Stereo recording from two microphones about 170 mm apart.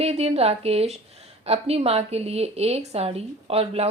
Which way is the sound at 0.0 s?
35° right (ahead or behind).